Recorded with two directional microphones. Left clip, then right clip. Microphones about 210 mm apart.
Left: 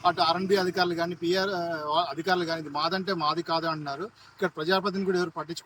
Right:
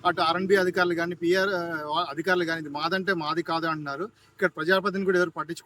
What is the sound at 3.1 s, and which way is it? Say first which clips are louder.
Speech: left 1 dB; 5° right (ahead or behind).